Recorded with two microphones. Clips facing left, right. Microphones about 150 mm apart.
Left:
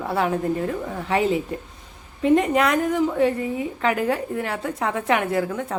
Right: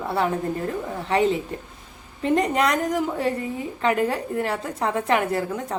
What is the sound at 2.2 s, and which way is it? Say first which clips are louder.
A woman's voice: left 3 dB; centre (ahead or behind).